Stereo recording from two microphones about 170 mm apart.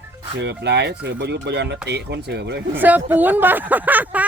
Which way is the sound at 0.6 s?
80° right.